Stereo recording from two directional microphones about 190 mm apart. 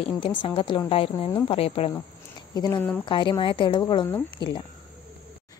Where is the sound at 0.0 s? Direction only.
25° left (ahead or behind).